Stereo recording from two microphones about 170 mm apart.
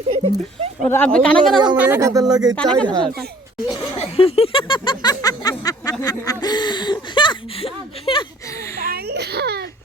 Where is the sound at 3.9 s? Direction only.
35° left (ahead or behind).